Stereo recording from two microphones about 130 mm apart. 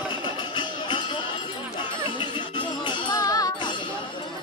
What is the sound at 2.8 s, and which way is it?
Music, 35° left (ahead or behind).